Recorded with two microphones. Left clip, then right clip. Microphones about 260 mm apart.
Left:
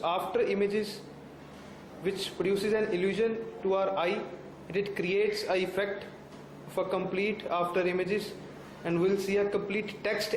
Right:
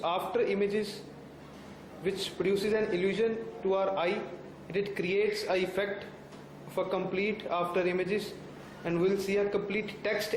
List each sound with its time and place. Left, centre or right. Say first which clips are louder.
0.0 s a man's voice: left 1 dB; centre
2.0 s a man's voice: even; centre